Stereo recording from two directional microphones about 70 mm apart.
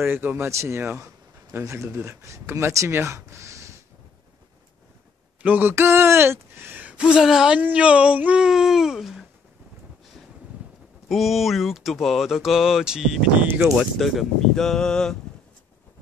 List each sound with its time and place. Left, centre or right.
0.0 s speech: right
0.5 s speech: right
5.4 s speech: right
6.9 s speech: centre
7.5 s speech: centre
11.1 s speech: centre
13.4 s speech: right
13.7 s speech: centre